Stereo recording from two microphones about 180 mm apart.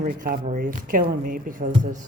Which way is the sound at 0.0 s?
50° right (ahead or behind).